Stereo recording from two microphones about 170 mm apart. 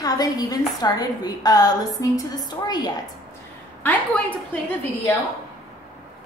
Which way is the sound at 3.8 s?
5° left (ahead or behind).